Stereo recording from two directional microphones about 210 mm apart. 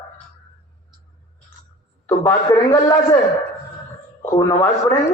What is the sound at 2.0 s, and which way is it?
A man's voice, 15° left (ahead or behind).